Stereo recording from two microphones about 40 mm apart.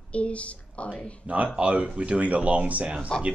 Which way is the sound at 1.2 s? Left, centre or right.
Right.